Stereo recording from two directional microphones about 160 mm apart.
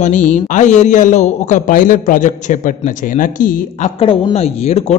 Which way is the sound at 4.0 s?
35° left (ahead or behind).